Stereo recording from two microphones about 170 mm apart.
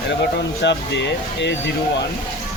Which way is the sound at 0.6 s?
90° left.